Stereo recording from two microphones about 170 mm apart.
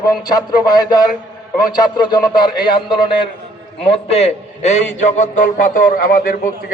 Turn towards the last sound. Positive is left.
turn(degrees=55)  # may be behind; listen again after turning